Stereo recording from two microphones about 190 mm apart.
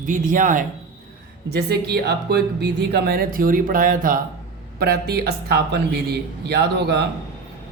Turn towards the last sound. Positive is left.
turn(degrees=-60)  # may be behind; listen again after turning